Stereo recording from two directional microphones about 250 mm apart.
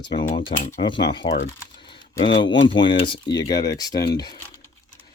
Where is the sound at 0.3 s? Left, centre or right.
Left.